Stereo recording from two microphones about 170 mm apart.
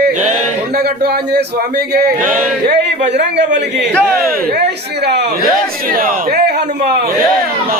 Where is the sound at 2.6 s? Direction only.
85° right.